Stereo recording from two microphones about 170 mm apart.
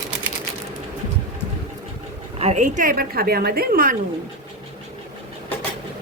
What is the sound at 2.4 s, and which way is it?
Speech, 40° right (ahead or behind).